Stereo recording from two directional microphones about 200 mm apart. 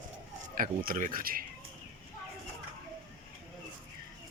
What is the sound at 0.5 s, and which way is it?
Speech, 45° right (ahead or behind).